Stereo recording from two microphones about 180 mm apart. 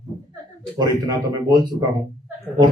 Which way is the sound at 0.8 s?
20° right (ahead or behind).